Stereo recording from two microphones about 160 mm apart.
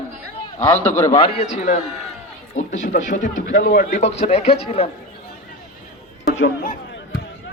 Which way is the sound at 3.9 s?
50° left (ahead or behind).